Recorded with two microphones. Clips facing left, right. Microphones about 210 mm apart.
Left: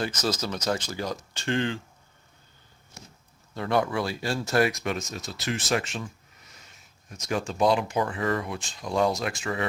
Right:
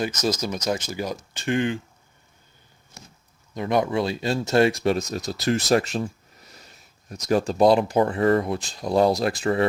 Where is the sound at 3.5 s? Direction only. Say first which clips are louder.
Right 3 dB; 20° right (ahead or behind).